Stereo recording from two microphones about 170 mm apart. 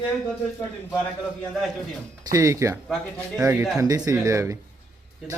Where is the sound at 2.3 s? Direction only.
20° right (ahead or behind).